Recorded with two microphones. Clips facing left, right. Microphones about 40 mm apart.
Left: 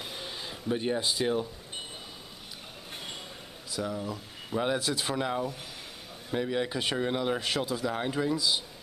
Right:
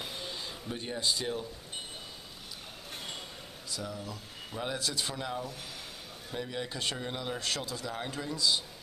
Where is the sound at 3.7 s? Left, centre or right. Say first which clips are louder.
Left 6 dB; centre.